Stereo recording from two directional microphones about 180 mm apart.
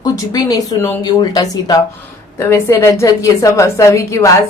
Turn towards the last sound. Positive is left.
turn(degrees=15)  # may be behind; listen again after turning